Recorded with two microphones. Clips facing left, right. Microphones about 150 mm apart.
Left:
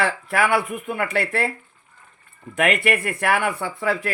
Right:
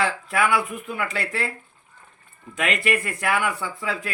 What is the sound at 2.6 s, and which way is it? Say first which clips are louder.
Speech: left 4 dB; 60° left (ahead or behind).